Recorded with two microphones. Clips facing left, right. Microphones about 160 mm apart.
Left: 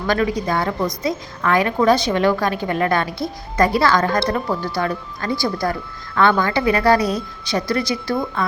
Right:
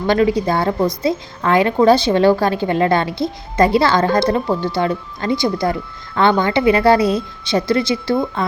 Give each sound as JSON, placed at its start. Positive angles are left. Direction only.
{"t": 0.1, "sound": "a woman's voice", "side_deg": -25}